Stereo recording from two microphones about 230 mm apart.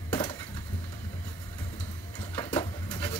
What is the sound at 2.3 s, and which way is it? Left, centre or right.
Printer, centre.